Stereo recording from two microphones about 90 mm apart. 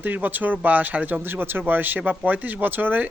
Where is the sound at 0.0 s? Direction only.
20° right (ahead or behind).